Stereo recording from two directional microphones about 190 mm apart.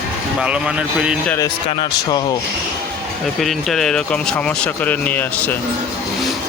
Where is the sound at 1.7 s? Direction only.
25° left (ahead or behind).